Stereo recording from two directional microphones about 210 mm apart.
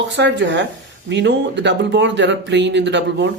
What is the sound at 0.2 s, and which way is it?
Speech, 60° right (ahead or behind).